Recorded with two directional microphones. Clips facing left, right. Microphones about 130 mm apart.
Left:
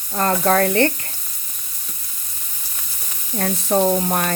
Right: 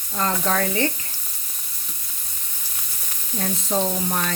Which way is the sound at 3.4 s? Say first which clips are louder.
Left 5 dB; 60° left (ahead or behind).